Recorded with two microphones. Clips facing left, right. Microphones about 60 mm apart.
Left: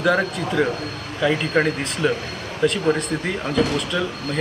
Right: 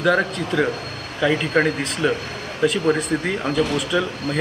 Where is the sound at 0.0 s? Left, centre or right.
Centre.